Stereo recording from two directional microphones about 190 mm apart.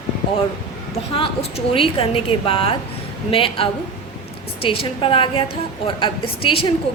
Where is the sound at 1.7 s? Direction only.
30° left (ahead or behind).